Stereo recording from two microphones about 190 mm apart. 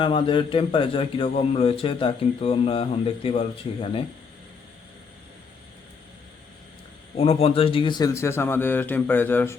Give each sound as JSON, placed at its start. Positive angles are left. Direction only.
{"t": 0.0, "sound": "a man's voice", "side_deg": 25}
{"t": 7.2, "sound": "a man's voice", "side_deg": 30}